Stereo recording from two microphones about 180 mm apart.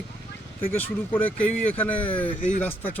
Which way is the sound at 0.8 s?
10° left (ahead or behind).